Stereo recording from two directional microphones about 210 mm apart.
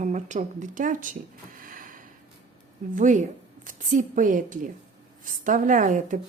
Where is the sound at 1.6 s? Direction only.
40° right (ahead or behind).